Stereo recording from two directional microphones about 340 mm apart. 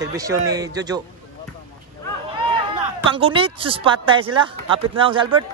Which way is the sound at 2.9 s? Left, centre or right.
Centre.